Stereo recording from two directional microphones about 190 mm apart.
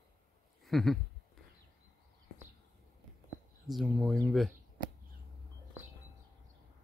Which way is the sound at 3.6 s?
Centre (ahead or behind).